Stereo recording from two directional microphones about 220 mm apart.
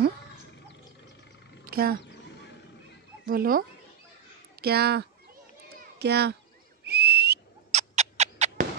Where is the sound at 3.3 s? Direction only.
40° right (ahead or behind).